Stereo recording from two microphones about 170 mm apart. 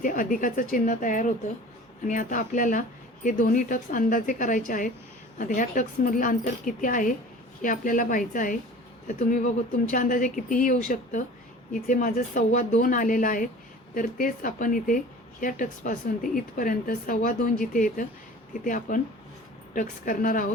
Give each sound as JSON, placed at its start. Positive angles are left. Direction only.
{"t": 0.0, "sound": "speech", "side_deg": 50}